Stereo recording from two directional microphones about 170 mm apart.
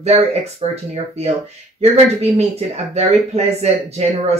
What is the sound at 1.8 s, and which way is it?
Speech, 40° right (ahead or behind).